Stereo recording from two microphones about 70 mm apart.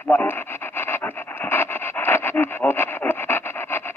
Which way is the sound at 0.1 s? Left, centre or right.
Left.